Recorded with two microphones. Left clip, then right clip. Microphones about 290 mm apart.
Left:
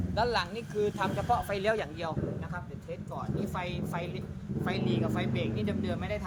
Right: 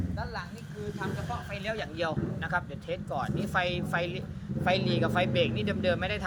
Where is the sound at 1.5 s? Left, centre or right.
Centre.